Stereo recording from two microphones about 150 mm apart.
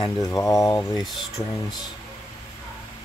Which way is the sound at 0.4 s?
20° left (ahead or behind).